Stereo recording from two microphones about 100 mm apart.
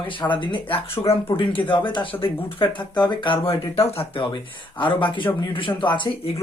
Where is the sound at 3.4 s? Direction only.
70° left (ahead or behind).